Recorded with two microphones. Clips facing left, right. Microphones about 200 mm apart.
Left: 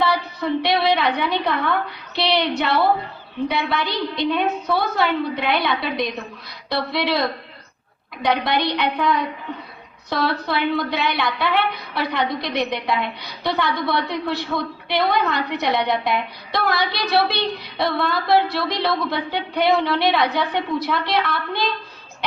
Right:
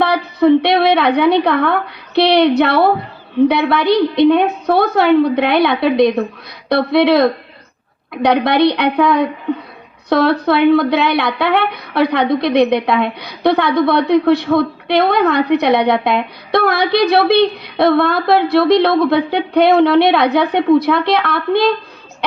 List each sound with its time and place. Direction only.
0.0 s a woman's voice: 60° right (ahead or behind)